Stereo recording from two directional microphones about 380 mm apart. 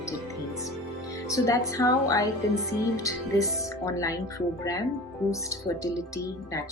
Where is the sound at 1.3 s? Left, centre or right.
Centre.